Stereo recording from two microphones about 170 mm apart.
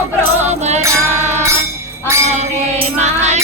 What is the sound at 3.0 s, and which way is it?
Music, 40° right (ahead or behind).